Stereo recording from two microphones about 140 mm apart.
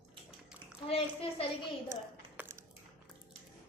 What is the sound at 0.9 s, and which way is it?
Speech, 40° left (ahead or behind).